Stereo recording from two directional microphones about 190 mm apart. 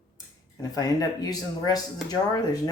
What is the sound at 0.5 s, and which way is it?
Speech, 20° left (ahead or behind).